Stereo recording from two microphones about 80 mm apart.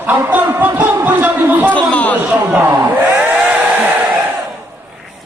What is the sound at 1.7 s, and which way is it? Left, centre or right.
Chatter, centre.